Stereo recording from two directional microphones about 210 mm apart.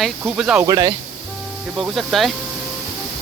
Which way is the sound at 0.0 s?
Centre (ahead or behind).